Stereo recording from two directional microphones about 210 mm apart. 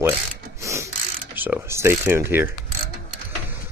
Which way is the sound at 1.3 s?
10° right (ahead or behind).